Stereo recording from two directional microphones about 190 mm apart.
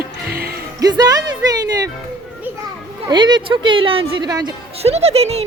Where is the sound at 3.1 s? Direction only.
20° right (ahead or behind).